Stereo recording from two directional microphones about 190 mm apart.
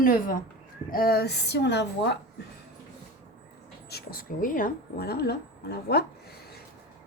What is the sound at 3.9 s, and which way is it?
A woman's voice, 55° left (ahead or behind).